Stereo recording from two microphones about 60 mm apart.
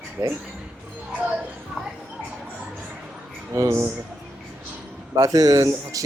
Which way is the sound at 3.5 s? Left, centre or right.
Right.